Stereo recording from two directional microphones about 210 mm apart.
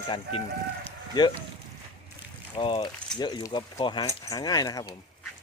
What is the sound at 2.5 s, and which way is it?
Speech, 25° left (ahead or behind).